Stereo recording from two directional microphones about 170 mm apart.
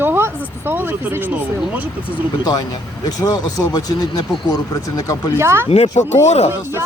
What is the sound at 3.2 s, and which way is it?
Speech, 25° left (ahead or behind).